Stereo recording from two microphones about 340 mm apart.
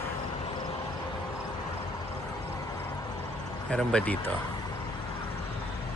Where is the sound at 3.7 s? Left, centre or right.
Centre.